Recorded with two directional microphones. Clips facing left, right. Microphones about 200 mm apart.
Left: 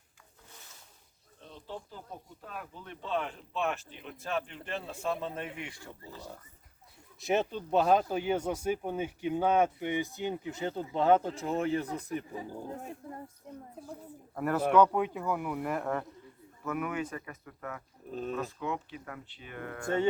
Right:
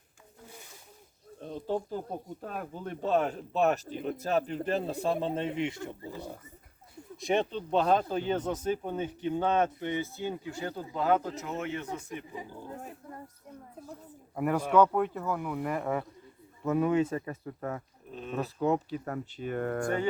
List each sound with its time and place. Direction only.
1.4 s speech: 45° right (ahead or behind); by 6.2 s 15° right (ahead or behind)
7.2 s speech: 5° left (ahead or behind); by 12.2 s 35° left (ahead or behind)
13.5 s speech: 30° left (ahead or behind)
14.3 s speech: 10° right (ahead or behind)
16.6 s speech: 25° right (ahead or behind)
18.1 s speech: 40° left (ahead or behind)
18.3 s speech: 35° right (ahead or behind)